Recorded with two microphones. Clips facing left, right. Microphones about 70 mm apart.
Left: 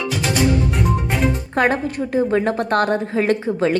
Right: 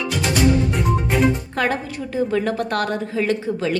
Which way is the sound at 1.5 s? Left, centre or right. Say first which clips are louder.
Left 4 dB; left.